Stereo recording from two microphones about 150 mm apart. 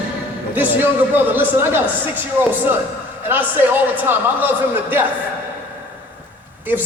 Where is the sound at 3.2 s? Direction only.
15° right (ahead or behind).